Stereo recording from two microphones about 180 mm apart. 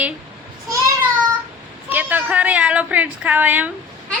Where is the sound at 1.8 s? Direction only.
10° right (ahead or behind).